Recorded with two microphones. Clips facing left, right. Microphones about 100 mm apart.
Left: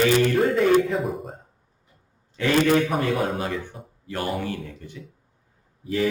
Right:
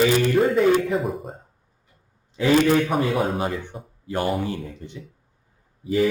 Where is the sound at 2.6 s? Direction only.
Centre (ahead or behind).